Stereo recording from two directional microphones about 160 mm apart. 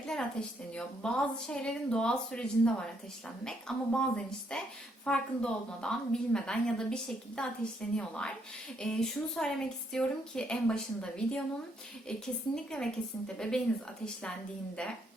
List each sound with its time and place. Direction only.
0.1 s a woman's voice: 5° left (ahead or behind)
12.7 s a woman's voice: 5° left (ahead or behind)